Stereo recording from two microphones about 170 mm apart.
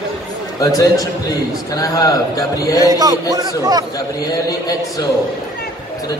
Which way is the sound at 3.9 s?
20° left (ahead or behind).